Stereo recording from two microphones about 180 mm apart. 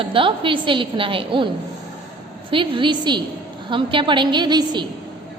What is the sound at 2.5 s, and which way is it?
A woman's voice, 30° right (ahead or behind).